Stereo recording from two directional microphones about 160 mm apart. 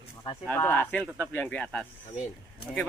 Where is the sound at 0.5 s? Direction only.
15° left (ahead or behind).